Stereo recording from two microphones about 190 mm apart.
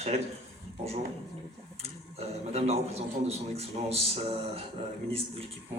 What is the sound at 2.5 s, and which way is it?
A man's voice, 35° right (ahead or behind).